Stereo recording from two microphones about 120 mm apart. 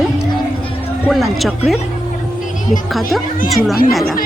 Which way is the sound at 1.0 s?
Centre (ahead or behind).